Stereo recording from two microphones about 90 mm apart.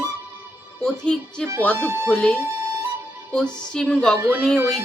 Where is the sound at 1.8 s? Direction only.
25° right (ahead or behind).